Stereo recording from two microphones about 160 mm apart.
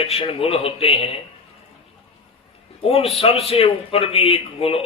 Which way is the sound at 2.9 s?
40° left (ahead or behind).